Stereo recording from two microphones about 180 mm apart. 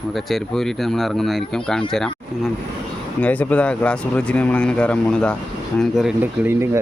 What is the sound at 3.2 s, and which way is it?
Speech, 10° left (ahead or behind).